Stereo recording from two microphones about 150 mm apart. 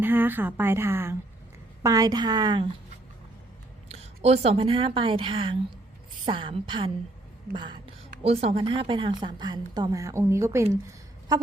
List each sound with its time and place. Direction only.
0.0 s a woman's voice: 15° right (ahead or behind); by 2.6 s 30° right (ahead or behind)
3.8 s a woman's voice: 45° right (ahead or behind)
8.2 s a woman's voice: 40° right (ahead or behind); by 10.8 s 20° right (ahead or behind)